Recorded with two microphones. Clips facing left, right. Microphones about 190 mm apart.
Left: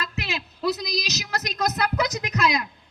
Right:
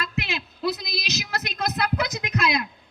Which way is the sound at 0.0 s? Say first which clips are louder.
Right 1 dB; 40° left (ahead or behind).